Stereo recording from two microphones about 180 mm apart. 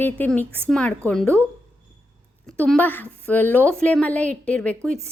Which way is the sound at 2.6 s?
10° left (ahead or behind).